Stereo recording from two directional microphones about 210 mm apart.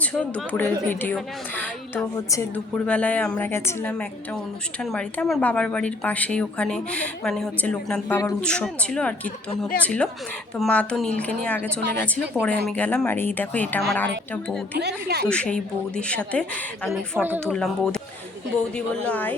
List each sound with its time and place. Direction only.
0.0 s a woman's voice: 5° left (ahead or behind)
14.8 s speech: 50° right (ahead or behind)
15.3 s speech: 5° left (ahead or behind)
16.9 s speech: 10° right (ahead or behind)
17.4 s speech: 5° left (ahead or behind)
19.0 s a woman's voice: 10° left (ahead or behind)